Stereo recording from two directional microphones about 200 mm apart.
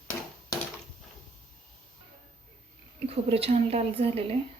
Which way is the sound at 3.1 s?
30° right (ahead or behind).